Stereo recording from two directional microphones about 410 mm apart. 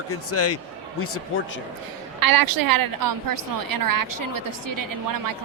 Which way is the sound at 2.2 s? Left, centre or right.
Right.